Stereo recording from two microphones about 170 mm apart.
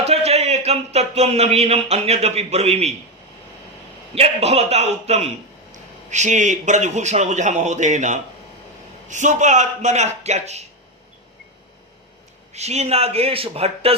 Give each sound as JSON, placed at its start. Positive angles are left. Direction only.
{"t": 0.0, "sound": "speech", "side_deg": -40}
{"t": 4.1, "sound": "a man's voice", "side_deg": -35}
{"t": 12.5, "sound": "speech", "side_deg": -40}